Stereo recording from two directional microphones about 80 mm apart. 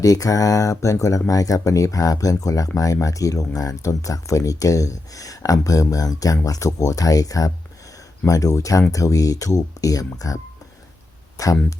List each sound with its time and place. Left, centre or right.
0.0 s speech: left